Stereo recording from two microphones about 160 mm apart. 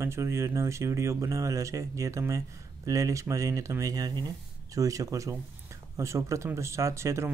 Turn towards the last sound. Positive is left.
turn(degrees=-15)  # may be behind; listen again after turning